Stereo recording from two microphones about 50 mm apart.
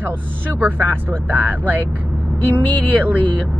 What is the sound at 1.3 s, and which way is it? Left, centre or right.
Speech, right.